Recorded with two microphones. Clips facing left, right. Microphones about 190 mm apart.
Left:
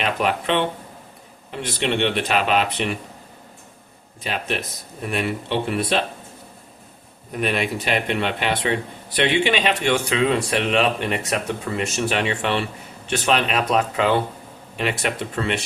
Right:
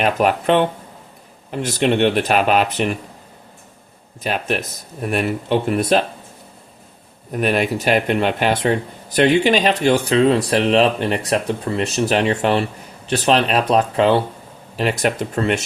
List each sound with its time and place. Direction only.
0.0 s speech: 45° right (ahead or behind)
4.2 s speech: 45° right (ahead or behind)
7.3 s speech: 45° right (ahead or behind)